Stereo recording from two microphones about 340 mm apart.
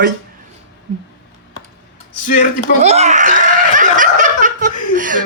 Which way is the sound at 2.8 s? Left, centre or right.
Centre.